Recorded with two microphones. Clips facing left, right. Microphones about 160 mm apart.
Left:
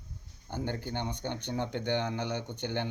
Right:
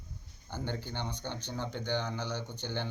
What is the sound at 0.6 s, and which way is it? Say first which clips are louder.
A man's voice: left 2 dB; 55° left (ahead or behind).